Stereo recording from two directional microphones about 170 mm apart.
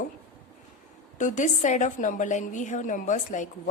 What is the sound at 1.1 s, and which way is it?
A woman's voice, 45° left (ahead or behind).